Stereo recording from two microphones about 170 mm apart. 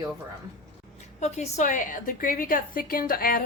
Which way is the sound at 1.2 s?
45° left (ahead or behind).